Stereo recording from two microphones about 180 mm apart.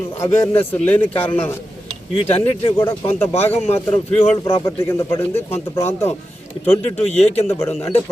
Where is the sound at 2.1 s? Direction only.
35° left (ahead or behind).